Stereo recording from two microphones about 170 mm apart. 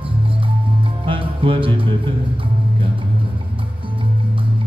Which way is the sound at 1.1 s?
30° right (ahead or behind).